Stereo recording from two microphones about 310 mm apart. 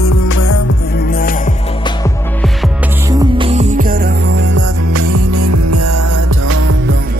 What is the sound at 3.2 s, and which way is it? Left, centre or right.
Music, centre.